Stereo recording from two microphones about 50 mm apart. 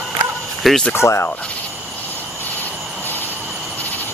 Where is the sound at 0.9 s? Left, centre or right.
Left.